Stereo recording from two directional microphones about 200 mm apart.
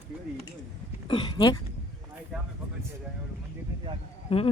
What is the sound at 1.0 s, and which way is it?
Speech, 25° left (ahead or behind).